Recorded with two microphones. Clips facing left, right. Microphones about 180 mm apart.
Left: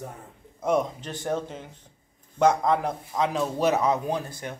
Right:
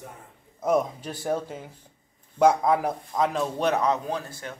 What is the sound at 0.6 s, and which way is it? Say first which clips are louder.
Speech: right 1 dB; 5° right (ahead or behind).